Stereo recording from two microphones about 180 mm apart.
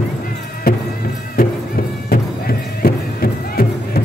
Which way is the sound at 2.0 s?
55° left (ahead or behind).